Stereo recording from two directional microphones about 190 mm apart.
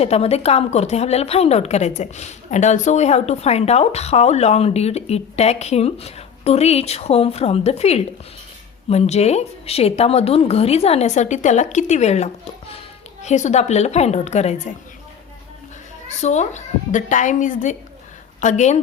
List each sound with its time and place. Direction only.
0.0 s a woman's voice: 35° left (ahead or behind)
16.0 s a woman's voice: 35° left (ahead or behind)